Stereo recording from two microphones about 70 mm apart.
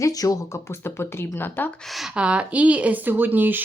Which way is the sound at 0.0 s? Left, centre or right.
Left.